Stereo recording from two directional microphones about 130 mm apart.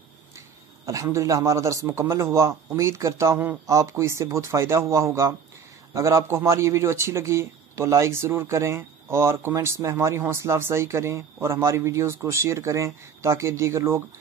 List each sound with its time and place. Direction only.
0.8 s speech: 25° right (ahead or behind)